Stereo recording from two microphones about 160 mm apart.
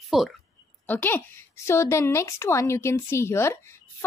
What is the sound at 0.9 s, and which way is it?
Speech, 10° left (ahead or behind).